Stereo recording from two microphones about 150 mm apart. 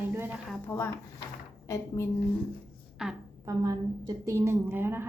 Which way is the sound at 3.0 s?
5° right (ahead or behind).